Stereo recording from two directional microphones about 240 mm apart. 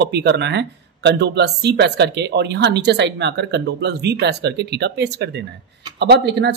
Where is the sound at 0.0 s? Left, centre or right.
Right.